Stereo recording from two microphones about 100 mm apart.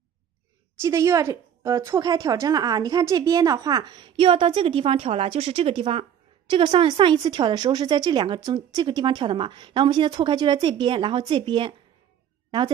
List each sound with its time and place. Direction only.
0.7 s a woman's voice: 30° right (ahead or behind); by 6.0 s 70° right (ahead or behind)
6.5 s a woman's voice: 55° right (ahead or behind)